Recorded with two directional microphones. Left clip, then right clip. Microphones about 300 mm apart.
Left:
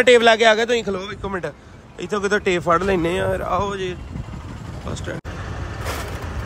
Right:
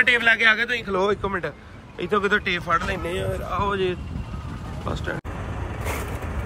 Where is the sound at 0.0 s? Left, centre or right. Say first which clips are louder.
Left 5 dB; centre.